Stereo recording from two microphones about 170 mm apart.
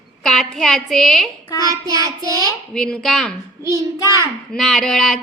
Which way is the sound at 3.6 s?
20° right (ahead or behind).